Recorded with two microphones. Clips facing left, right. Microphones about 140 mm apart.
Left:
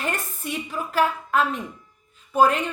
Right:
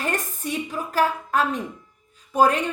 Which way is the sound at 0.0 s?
40° right (ahead or behind).